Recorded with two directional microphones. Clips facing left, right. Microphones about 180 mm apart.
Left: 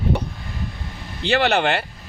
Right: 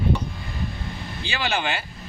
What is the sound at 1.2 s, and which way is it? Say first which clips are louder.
Speech: left 9 dB; 65° left (ahead or behind).